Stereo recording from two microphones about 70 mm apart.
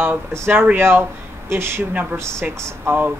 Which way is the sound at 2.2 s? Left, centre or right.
Right.